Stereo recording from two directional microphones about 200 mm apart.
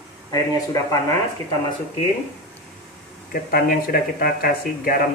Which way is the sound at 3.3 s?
45° left (ahead or behind).